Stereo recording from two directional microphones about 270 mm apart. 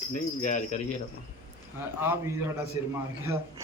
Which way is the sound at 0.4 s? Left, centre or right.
Left.